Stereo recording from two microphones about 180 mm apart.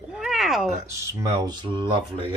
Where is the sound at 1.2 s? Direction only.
15° right (ahead or behind).